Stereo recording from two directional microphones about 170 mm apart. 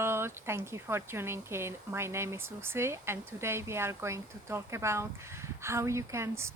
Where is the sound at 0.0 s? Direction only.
15° right (ahead or behind).